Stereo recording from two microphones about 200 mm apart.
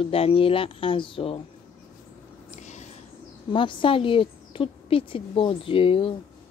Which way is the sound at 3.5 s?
25° left (ahead or behind).